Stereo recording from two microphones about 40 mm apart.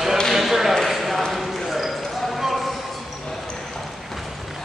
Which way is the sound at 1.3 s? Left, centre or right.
Centre.